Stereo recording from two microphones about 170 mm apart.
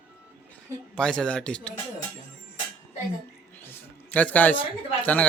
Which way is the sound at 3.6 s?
10° left (ahead or behind).